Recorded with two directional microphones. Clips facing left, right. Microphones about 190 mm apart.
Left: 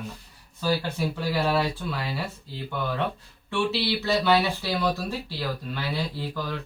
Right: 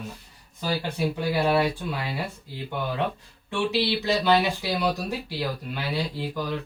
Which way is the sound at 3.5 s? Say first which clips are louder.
Right 1 dB; 15° right (ahead or behind).